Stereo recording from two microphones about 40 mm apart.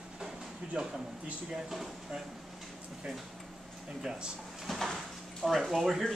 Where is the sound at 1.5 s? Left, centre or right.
Centre.